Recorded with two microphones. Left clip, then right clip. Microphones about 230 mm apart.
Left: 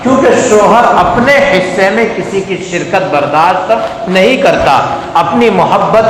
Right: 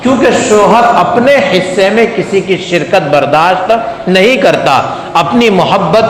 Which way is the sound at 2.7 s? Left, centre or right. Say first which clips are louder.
Right 2 dB; right.